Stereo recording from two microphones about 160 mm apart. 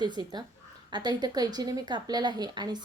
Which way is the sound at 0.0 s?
25° right (ahead or behind).